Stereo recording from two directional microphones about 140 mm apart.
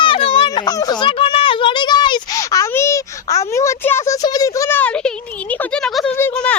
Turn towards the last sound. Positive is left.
turn(degrees=5)  # may be behind; listen again after turning